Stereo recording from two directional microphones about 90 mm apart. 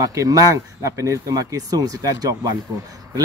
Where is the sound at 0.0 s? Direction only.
40° right (ahead or behind).